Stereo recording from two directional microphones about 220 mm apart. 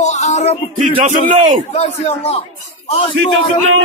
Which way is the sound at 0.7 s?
35° right (ahead or behind).